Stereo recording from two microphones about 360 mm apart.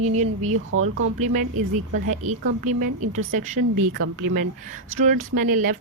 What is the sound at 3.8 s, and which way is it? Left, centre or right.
Speech, right.